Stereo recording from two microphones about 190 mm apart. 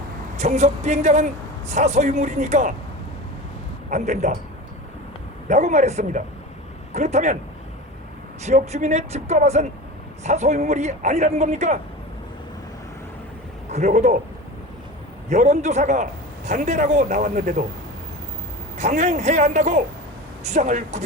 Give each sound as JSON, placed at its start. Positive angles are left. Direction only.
{"t": 0.3, "sound": "a man's voice", "side_deg": -35}
{"t": 3.8, "sound": "a man's voice", "side_deg": -40}
{"t": 5.5, "sound": "a man's voice", "side_deg": -35}
{"t": 8.4, "sound": "a man's voice", "side_deg": -35}
{"t": 13.7, "sound": "a man's voice", "side_deg": -35}
{"t": 15.3, "sound": "a man's voice", "side_deg": -35}
{"t": 18.8, "sound": "a man's voice", "side_deg": -35}